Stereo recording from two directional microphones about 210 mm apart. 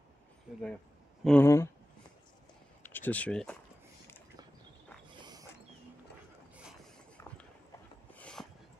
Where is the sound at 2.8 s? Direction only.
10° left (ahead or behind).